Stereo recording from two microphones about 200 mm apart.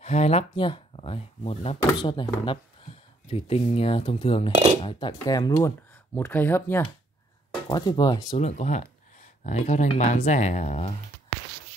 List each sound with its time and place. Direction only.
0.0 s speech: 30° left (ahead or behind); by 6.9 s 10° left (ahead or behind)
7.6 s speech: 20° left (ahead or behind)
8.4 s speech: 35° left (ahead or behind)